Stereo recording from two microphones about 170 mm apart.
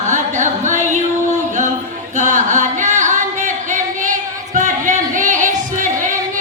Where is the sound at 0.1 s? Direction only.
45° right (ahead or behind).